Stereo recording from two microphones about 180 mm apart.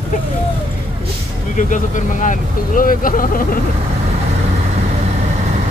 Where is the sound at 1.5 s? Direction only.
45° left (ahead or behind).